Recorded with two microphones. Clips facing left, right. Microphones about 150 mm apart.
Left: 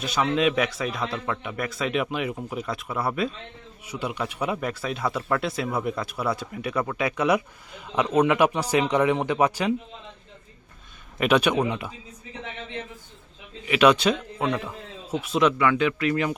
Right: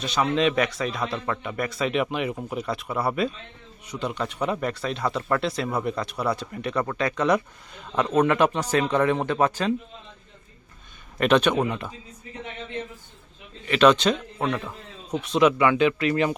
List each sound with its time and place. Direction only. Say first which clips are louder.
0.0 s speech: even; centre (ahead or behind)
11.2 s speech: right 1 dB; 10° left (ahead or behind)
13.7 s a man's voice: right 1 dB; 10° left (ahead or behind)
15.5 s speech: right 2 dB; 20° right (ahead or behind)